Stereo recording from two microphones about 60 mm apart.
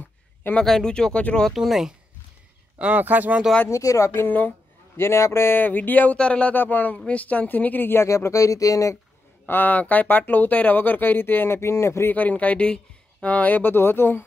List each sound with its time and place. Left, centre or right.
0.7 s speech: centre
1.5 s speech: centre
2.8 s speech: right
3.7 s speech: left
4.1 s speech: left
4.9 s a man's voice: left
5.6 s speech: left
6.1 s speech: centre
6.5 s speech: left
8.1 s speech: left
9.5 s speech: left
12.1 s speech: left